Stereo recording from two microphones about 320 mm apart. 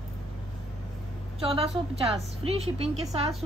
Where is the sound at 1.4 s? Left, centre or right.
Centre.